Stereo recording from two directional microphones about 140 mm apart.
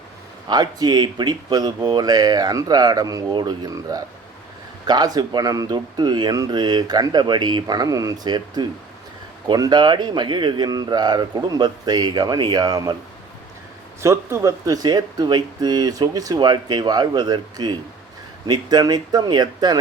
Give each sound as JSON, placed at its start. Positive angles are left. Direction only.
{"t": 0.4, "sound": "speech", "side_deg": -30}
{"t": 14.0, "sound": "speech", "side_deg": -20}